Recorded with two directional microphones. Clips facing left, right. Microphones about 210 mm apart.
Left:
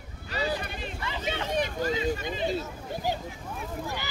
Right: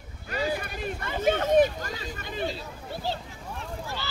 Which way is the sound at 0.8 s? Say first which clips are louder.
Right 12 dB; 50° right (ahead or behind).